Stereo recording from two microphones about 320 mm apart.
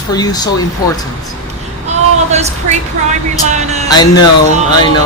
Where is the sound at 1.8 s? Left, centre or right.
Right.